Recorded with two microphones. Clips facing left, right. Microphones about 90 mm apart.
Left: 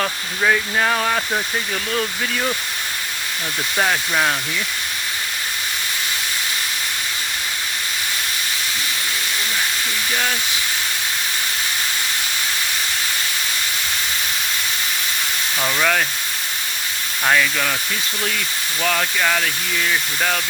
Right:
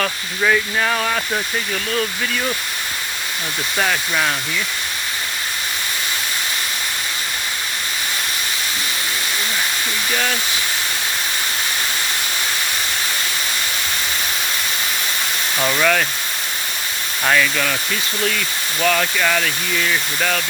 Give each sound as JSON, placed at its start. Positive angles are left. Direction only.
{"t": 0.0, "sound": "speech", "side_deg": 35}
{"t": 3.8, "sound": "speech", "side_deg": 35}
{"t": 15.8, "sound": "speech", "side_deg": 10}
{"t": 17.2, "sound": "speech", "side_deg": 10}
{"t": 18.8, "sound": "speech", "side_deg": 10}